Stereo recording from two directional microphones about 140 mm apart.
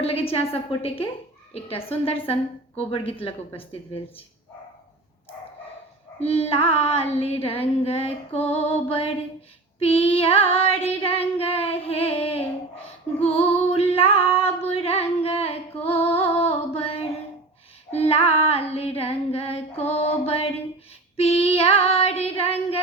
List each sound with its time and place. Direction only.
0.0 s child singing: 45° left (ahead or behind)
6.1 s child singing: 45° left (ahead or behind)
15.8 s music: 45° left (ahead or behind)
17.9 s child singing: 45° left (ahead or behind)